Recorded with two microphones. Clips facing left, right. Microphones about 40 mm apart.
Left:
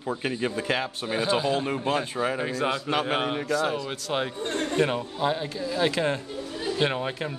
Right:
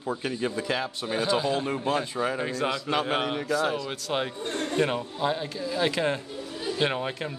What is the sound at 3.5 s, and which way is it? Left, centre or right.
A man's voice, centre.